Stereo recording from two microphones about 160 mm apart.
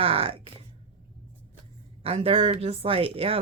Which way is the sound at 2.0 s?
35° right (ahead or behind).